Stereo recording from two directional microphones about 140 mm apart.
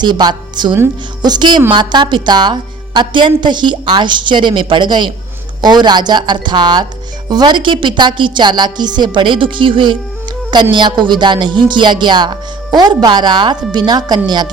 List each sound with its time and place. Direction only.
0.0 s a woman's voice: 30° right (ahead or behind)